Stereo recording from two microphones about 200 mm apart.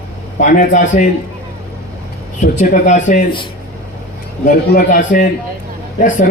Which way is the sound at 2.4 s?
40° left (ahead or behind).